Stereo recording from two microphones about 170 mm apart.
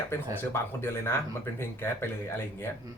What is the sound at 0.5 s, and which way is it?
Speech, 15° left (ahead or behind).